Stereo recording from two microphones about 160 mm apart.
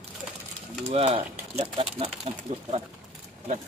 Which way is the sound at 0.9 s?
40° right (ahead or behind).